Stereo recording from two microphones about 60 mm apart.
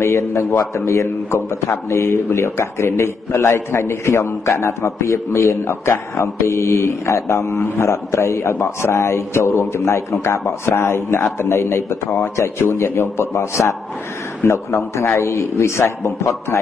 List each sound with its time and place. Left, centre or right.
0.0 s a man's voice: left
6.2 s a man's voice: left